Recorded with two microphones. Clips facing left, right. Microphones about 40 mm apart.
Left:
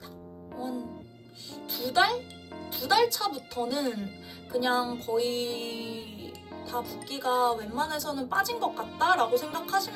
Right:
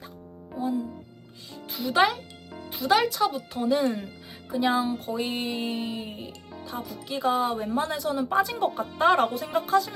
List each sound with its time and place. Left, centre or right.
0.5 s music: right
2.6 s speech: centre